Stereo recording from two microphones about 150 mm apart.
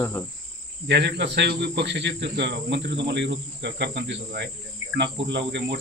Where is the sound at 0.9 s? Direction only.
90° right.